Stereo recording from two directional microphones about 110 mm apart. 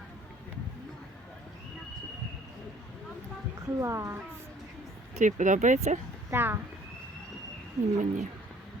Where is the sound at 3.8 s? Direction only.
25° right (ahead or behind).